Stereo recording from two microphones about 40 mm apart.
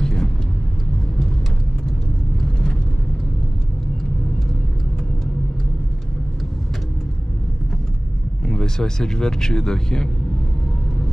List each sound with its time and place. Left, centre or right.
0.0 s vehicle: centre
8.5 s speech: centre